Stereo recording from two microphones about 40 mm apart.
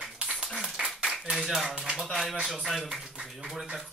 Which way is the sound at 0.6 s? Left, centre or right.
Centre.